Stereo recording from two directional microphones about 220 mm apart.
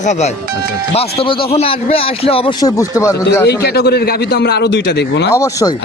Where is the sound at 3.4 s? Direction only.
45° left (ahead or behind).